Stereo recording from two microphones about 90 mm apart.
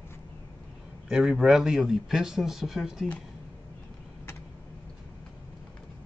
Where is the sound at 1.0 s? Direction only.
5° right (ahead or behind).